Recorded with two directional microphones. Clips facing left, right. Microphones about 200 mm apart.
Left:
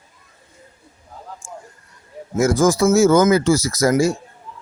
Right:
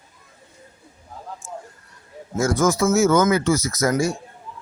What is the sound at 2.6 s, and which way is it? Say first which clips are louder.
Speech: left 4 dB; 35° left (ahead or behind).